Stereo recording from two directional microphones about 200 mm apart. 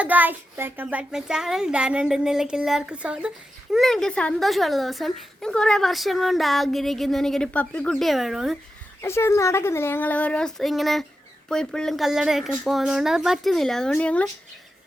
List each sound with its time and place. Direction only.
0.0 s a woman's voice: 10° right (ahead or behind)
9.0 s a woman's voice: 15° left (ahead or behind)